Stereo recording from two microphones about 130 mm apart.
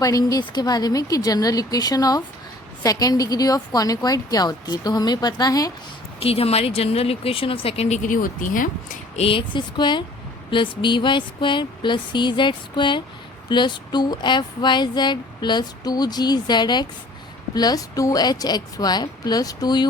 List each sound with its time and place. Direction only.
0.0 s a woman's voice: 25° left (ahead or behind)
6.1 s speech: 50° left (ahead or behind); by 9.2 s 90° left
9.2 s speech: 40° left (ahead or behind)